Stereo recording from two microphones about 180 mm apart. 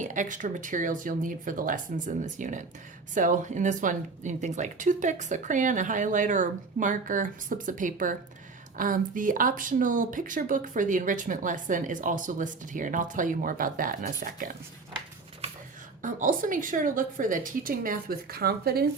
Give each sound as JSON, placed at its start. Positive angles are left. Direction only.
{"t": 0.0, "sound": "speech", "side_deg": -45}
{"t": 16.0, "sound": "speech", "side_deg": -45}